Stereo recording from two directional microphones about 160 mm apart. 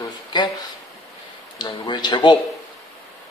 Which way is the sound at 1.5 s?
25° left (ahead or behind).